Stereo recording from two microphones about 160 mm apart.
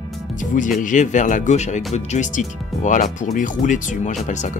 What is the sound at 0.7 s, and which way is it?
Speech, 50° left (ahead or behind).